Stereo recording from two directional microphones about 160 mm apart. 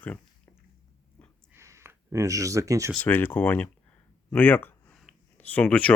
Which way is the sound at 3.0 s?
10° left (ahead or behind).